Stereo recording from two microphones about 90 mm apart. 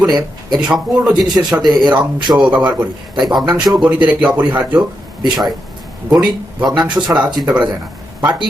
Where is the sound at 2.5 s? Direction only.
15° right (ahead or behind).